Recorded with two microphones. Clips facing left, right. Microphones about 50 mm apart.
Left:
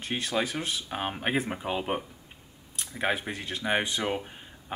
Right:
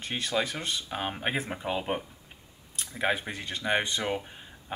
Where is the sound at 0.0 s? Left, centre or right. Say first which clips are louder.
Even; centre.